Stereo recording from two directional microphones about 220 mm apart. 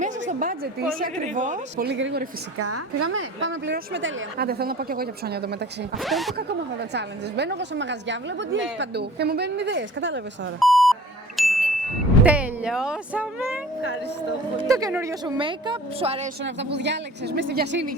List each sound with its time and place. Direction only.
0.0 s a woman's voice: 35° right (ahead or behind)
6.0 s speech: centre (ahead or behind)
6.9 s a woman's voice: 50° right (ahead or behind)
10.6 s beep: centre (ahead or behind)
11.3 s ding: centre (ahead or behind)
12.2 s music: 5° right (ahead or behind)
14.6 s speech: 15° right (ahead or behind)
16.4 s a woman's voice: 50° right (ahead or behind)